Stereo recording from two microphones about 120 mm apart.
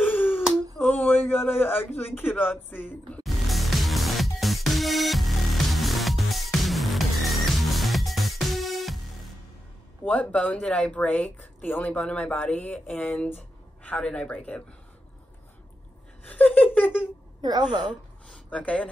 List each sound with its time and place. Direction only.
0.0 s a sound: 15° left (ahead or behind)
1.6 s speech: 15° left (ahead or behind)
3.3 s music: centre (ahead or behind)
10.0 s speech: 10° left (ahead or behind)
16.3 s speech: 10° left (ahead or behind)
17.4 s a woman's voice: 35° right (ahead or behind)
18.3 s a sound: 10° left (ahead or behind)